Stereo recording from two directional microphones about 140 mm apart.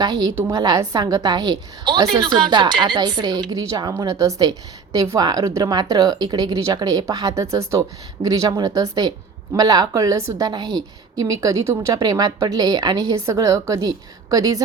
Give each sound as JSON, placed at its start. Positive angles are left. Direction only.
{"t": 0.0, "sound": "speech", "side_deg": -30}